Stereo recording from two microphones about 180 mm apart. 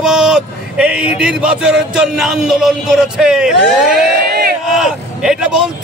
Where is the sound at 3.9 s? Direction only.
60° right (ahead or behind).